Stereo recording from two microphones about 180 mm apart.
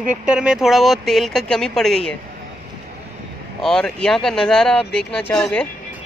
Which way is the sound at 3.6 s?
5° left (ahead or behind).